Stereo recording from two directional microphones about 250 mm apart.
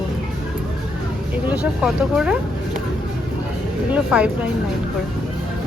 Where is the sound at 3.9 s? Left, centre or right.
Centre.